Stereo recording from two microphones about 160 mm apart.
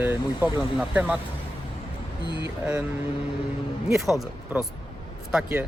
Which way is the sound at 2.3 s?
90° right.